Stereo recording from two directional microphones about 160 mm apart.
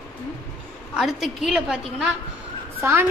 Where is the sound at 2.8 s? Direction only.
15° right (ahead or behind).